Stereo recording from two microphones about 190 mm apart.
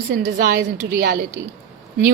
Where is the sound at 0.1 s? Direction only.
60° right (ahead or behind).